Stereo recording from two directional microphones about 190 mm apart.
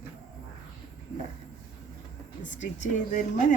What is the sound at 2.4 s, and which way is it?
Speech, 40° left (ahead or behind).